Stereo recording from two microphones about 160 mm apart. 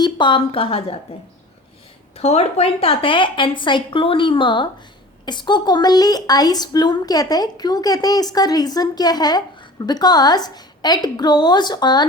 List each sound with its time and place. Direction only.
0.0 s a woman's voice: 30° left (ahead or behind)
2.1 s a woman's voice: 40° left (ahead or behind)